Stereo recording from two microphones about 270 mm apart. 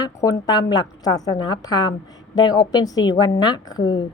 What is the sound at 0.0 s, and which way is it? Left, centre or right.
A woman's voice, centre.